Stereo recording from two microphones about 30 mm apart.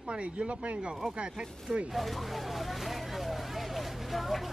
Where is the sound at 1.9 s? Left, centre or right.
Centre.